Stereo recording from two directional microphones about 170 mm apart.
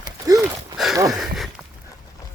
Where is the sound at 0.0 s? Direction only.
20° right (ahead or behind).